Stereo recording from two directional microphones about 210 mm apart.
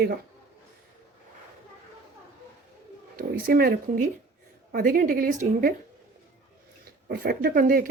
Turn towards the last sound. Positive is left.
turn(degrees=-40)  # may be behind; listen again after turning